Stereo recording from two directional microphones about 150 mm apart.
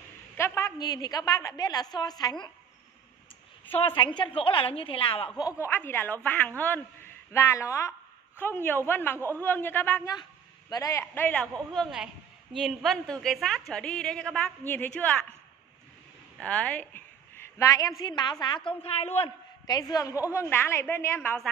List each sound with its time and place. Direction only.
0.4 s a woman's voice: 20° left (ahead or behind)
3.8 s a woman's voice: 30° left (ahead or behind)
5.6 s a woman's voice: 15° left (ahead or behind)
11.7 s a woman's voice: centre (ahead or behind)
16.3 s a woman's voice: 10° left (ahead or behind); by 19.3 s 40° left (ahead or behind)
19.6 s a woman's voice: 25° left (ahead or behind); by 21.5 s 10° left (ahead or behind)